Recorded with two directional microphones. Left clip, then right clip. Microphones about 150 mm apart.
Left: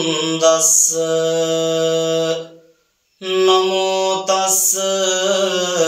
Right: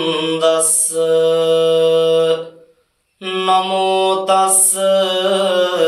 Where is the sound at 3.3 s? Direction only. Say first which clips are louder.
Even; 30° left (ahead or behind).